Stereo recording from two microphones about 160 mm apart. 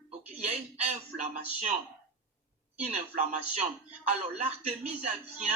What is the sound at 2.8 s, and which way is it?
Speech, 45° right (ahead or behind).